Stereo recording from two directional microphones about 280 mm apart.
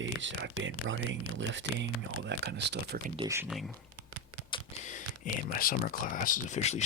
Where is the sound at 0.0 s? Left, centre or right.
Right.